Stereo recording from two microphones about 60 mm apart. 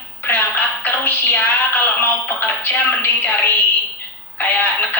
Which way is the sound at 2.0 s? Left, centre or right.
Left.